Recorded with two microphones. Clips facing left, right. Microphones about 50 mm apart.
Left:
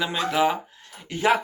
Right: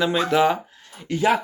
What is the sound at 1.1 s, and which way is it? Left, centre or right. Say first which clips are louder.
Speech: right 8 dB; centre.